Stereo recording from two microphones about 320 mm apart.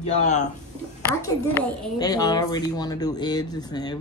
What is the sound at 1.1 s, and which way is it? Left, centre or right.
A woman's voice, centre.